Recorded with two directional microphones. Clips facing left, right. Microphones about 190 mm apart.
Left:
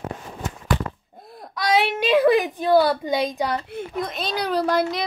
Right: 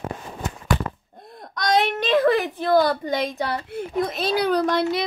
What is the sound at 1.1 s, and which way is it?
Whimper, 5° left (ahead or behind).